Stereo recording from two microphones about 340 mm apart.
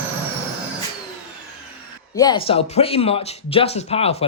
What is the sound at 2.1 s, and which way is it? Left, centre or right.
Speech, centre.